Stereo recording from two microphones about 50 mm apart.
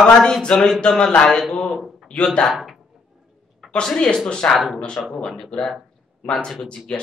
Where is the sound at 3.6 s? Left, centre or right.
Centre.